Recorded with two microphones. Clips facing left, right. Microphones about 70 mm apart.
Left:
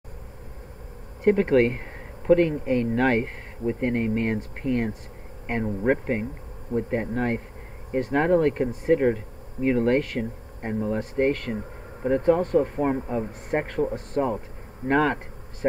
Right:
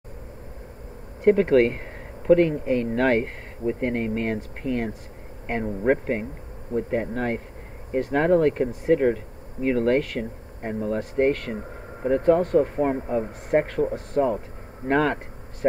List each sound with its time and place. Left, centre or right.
1.2 s speech: centre